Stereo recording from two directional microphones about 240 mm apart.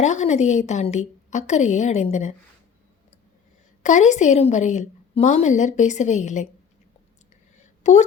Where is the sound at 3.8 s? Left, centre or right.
Left.